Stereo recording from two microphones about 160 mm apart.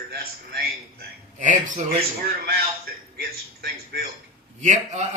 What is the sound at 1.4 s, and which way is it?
Speech, 50° right (ahead or behind).